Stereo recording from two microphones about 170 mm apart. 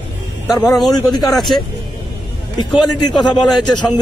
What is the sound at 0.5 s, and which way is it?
Speech, 20° left (ahead or behind).